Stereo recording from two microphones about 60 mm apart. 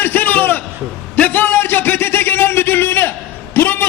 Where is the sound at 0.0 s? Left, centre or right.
Left.